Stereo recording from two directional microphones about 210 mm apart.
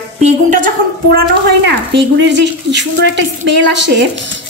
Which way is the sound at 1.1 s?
55° right (ahead or behind).